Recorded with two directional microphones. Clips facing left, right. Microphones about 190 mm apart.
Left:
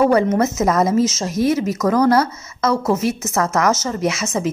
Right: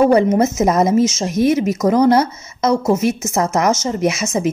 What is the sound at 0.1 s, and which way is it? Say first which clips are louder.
A woman's voice: right 3 dB; 20° right (ahead or behind).